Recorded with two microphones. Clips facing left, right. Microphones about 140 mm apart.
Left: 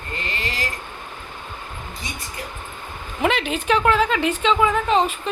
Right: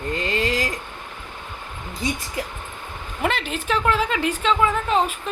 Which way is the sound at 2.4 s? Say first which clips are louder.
Right 5 dB; 90° right.